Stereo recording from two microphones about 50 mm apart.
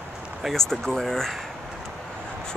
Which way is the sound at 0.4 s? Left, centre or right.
Centre.